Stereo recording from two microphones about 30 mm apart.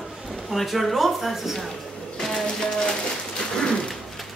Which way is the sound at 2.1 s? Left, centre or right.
Centre.